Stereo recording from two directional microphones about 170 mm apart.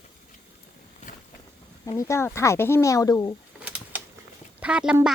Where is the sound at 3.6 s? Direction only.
5° right (ahead or behind).